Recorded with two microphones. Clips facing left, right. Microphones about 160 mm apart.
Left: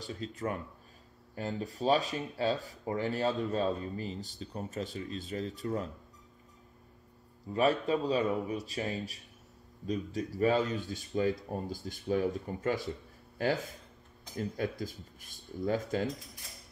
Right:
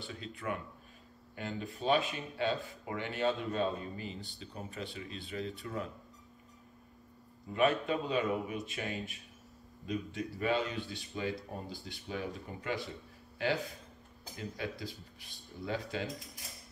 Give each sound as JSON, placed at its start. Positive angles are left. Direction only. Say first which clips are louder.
{"t": 0.0, "sound": "speech", "louder": "left 4 dB", "side_deg": 40}
{"t": 7.5, "sound": "speech", "louder": "left 2 dB", "side_deg": 35}